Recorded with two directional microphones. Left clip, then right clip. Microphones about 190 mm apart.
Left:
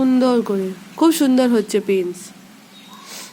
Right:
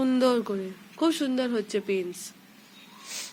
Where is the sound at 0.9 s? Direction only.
30° left (ahead or behind).